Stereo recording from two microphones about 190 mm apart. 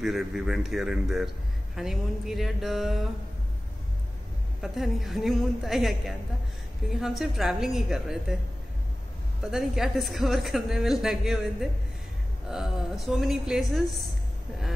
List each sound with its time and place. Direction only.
0.0 s a woman's voice: centre (ahead or behind)
4.6 s a woman's voice: centre (ahead or behind)
9.4 s a woman's voice: centre (ahead or behind)